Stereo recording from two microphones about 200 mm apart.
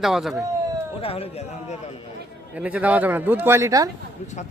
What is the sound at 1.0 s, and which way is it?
Speech, 30° left (ahead or behind).